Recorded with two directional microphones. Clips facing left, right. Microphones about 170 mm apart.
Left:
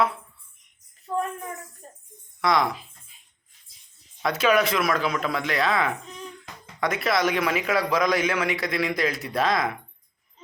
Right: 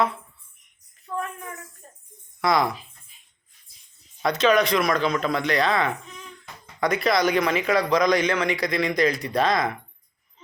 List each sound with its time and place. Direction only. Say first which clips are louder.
1.0 s jingle bell: left 3 dB; 35° left (ahead or behind)
1.8 s music: left 3 dB; 35° left (ahead or behind)
2.4 s speech: right 1 dB; centre (ahead or behind)
4.2 s a man's voice: right 2 dB; 5° left (ahead or behind)